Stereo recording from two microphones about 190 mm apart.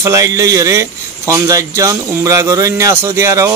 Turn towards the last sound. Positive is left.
turn(degrees=-15)  # may be behind; listen again after turning